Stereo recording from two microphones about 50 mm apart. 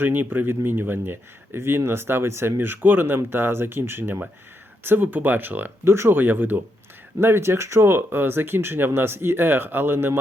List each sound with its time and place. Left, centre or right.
0.0 s speech: right
2.6 s speech: right
5.8 s speech: right
6.1 s speech: right
7.2 s speech: right